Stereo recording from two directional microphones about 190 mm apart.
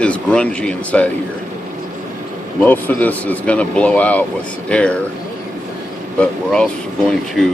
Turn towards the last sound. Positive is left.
turn(degrees=0)  # may be behind; listen again after turning